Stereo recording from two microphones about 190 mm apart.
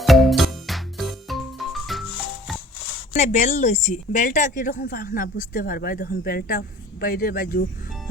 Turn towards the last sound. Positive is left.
turn(degrees=50)  # may be behind; listen again after turning